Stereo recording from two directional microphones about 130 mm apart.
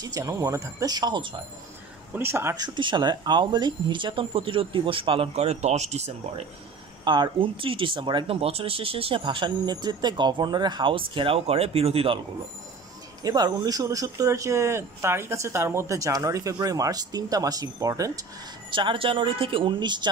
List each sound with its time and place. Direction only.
0.0 s speech: 25° right (ahead or behind)
2.1 s speech: 20° right (ahead or behind)
2.6 s speech: 35° right (ahead or behind); by 6.4 s 60° right (ahead or behind)
7.1 s speech: 40° right (ahead or behind)
13.2 s speech: 30° right (ahead or behind)
18.7 s speech: 40° right (ahead or behind)